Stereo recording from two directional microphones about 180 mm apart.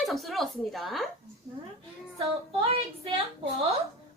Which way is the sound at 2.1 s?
30° right (ahead or behind).